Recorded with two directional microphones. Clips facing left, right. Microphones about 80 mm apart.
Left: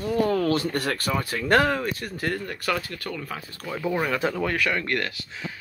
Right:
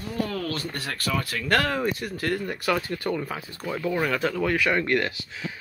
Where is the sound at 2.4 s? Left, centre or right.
Centre.